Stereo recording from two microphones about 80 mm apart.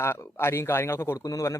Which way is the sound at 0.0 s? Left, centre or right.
Left.